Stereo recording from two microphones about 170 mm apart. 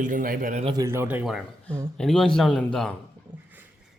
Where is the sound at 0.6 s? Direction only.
20° right (ahead or behind); by 2.9 s 5° left (ahead or behind).